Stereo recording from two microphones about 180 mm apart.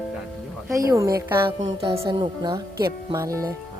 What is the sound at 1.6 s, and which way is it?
Speech, 30° right (ahead or behind).